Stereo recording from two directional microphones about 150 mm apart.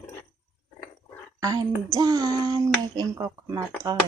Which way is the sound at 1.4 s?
25° right (ahead or behind).